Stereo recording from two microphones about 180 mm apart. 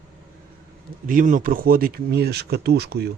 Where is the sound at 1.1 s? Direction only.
50° right (ahead or behind).